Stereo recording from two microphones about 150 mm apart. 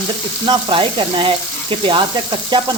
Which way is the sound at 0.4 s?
30° right (ahead or behind).